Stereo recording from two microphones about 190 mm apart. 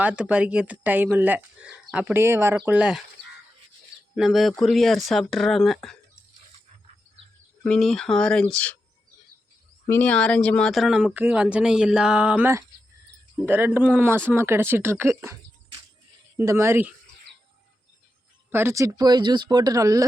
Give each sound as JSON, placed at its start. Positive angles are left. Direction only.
{"t": 0.0, "sound": "speech", "side_deg": -5}
{"t": 4.1, "sound": "speech", "side_deg": 0}
{"t": 7.6, "sound": "speech", "side_deg": 0}
{"t": 9.8, "sound": "speech", "side_deg": 10}
{"t": 16.4, "sound": "speech", "side_deg": -15}
{"t": 18.5, "sound": "speech", "side_deg": -15}